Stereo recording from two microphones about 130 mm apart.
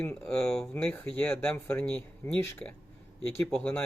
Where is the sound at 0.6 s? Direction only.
15° left (ahead or behind).